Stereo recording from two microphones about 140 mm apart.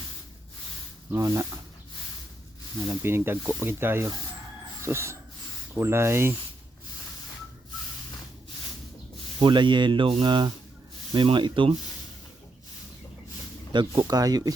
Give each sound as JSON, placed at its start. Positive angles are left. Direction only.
{"t": 1.1, "sound": "speech", "side_deg": -20}
{"t": 2.9, "sound": "speech", "side_deg": -15}
{"t": 4.8, "sound": "a sound", "side_deg": -20}
{"t": 5.7, "sound": "speech", "side_deg": -20}
{"t": 9.4, "sound": "speech", "side_deg": -35}
{"t": 13.7, "sound": "speech", "side_deg": -30}